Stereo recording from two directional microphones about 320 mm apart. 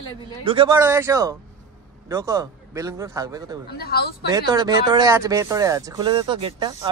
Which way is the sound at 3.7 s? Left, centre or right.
Left.